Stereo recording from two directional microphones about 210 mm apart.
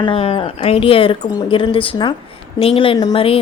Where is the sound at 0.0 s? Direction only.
25° left (ahead or behind).